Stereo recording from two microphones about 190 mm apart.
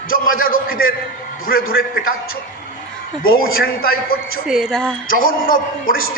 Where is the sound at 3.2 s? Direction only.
50° left (ahead or behind).